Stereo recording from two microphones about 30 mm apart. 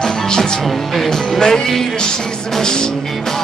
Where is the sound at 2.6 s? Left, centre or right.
Left.